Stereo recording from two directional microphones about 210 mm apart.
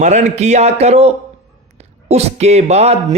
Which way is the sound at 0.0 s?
35° right (ahead or behind).